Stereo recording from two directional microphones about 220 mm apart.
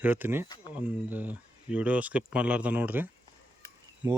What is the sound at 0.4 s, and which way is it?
Speech, 20° left (ahead or behind).